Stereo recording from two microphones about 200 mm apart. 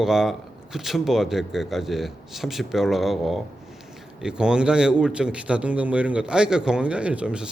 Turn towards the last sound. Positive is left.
turn(degrees=-5)  # may be behind; listen again after turning